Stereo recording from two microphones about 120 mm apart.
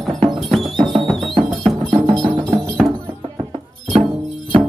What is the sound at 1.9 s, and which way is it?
Music, 35° right (ahead or behind).